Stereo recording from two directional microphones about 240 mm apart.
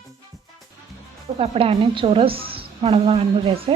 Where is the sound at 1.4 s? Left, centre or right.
Right.